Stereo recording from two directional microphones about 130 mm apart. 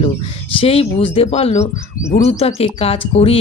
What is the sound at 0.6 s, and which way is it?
Speech, 45° left (ahead or behind).